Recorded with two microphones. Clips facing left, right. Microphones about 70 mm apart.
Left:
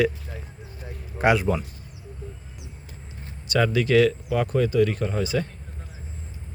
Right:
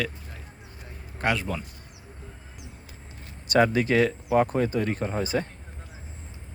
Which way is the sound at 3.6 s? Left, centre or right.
Right.